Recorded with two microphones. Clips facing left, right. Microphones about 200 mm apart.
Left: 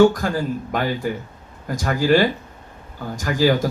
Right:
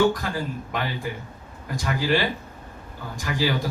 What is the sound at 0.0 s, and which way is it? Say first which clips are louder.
Speech: left 7 dB; 45° left (ahead or behind).